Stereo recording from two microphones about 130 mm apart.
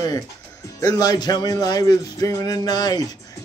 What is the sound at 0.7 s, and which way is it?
Speech, 30° left (ahead or behind).